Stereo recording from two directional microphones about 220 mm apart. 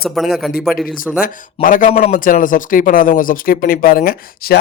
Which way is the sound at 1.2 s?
35° left (ahead or behind).